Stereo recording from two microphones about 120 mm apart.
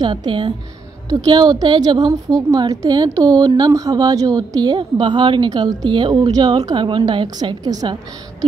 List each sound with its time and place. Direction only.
0.0 s a woman's voice: 40° right (ahead or behind)